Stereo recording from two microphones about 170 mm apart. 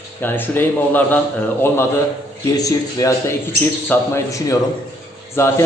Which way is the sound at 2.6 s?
20° left (ahead or behind).